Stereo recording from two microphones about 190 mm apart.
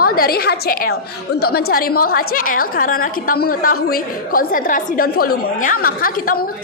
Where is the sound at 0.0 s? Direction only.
50° left (ahead or behind).